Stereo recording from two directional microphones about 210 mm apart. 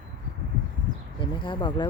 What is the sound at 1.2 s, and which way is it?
Speech, 25° left (ahead or behind).